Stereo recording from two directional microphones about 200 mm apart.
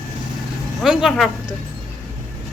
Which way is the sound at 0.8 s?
Centre (ahead or behind).